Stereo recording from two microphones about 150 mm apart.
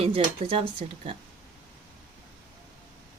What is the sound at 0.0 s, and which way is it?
Speech, 40° right (ahead or behind).